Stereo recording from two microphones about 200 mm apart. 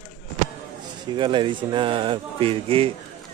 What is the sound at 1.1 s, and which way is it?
Speech, 25° right (ahead or behind).